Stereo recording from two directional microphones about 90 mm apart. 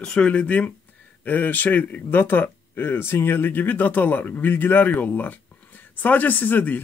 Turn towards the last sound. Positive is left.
turn(degrees=20)  # may be behind; listen again after turning